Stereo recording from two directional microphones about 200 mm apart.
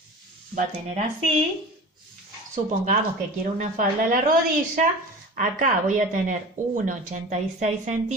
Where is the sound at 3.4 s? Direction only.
40° right (ahead or behind).